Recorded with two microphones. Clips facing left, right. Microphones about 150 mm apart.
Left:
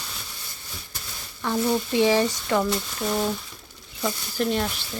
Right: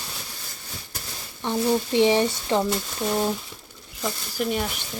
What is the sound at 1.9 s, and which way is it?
Speech, 20° right (ahead or behind).